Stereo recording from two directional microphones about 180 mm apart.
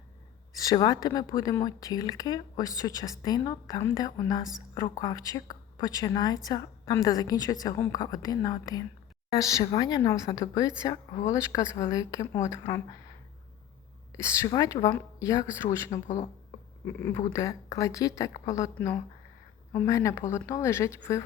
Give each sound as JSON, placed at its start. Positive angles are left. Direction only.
{"t": 0.5, "sound": "speech", "side_deg": 20}
{"t": 14.1, "sound": "speech", "side_deg": 15}